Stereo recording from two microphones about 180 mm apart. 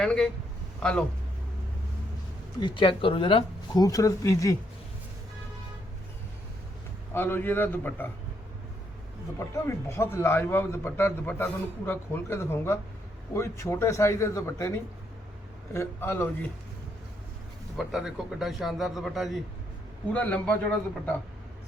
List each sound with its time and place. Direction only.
0.0 s a man's voice: 5° left (ahead or behind)
2.6 s speech: 25° left (ahead or behind)
7.1 s a man's voice: 10° left (ahead or behind)
9.4 s a man's voice: 15° left (ahead or behind)
15.7 s a man's voice: 15° left (ahead or behind)
17.7 s a man's voice: centre (ahead or behind)